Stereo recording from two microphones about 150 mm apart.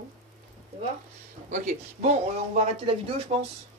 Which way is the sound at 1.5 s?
50° right (ahead or behind).